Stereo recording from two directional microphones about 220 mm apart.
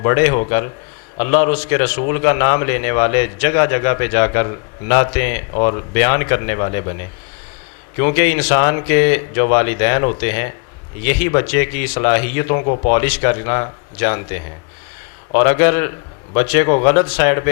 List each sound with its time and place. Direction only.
0.0 s a man's voice: 20° left (ahead or behind)
7.9 s a man's voice: 20° left (ahead or behind)
13.0 s a man's voice: 20° left (ahead or behind)